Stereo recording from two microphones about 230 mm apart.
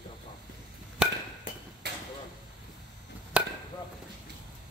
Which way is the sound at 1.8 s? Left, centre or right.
Right.